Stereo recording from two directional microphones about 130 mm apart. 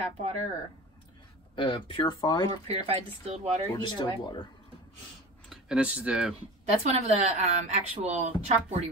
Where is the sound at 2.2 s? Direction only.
30° left (ahead or behind).